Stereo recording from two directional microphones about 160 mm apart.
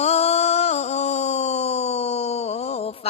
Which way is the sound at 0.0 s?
40° left (ahead or behind).